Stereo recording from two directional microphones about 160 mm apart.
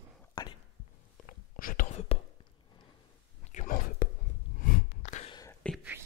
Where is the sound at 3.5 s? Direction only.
55° left (ahead or behind).